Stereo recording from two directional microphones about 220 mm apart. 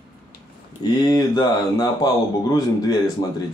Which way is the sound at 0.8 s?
15° left (ahead or behind).